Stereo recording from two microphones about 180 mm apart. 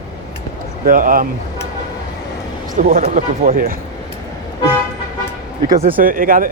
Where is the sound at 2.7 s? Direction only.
45° right (ahead or behind).